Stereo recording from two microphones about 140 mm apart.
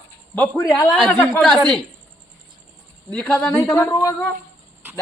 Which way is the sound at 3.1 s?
5° left (ahead or behind).